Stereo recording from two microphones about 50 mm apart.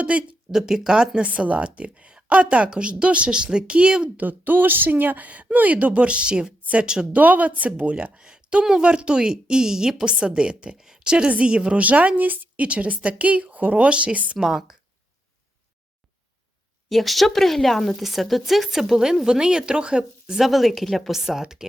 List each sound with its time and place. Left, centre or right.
0.0 s a woman's voice: right
0.5 s a woman's voice: centre
4.2 s speech: right; by 6.5 s centre
6.6 s a sound: right
6.8 s a woman's voice: centre
7.1 s a woman's voice: right
14.3 s a woman's voice: centre
16.9 s a woman's voice: centre
20.5 s a woman's voice: centre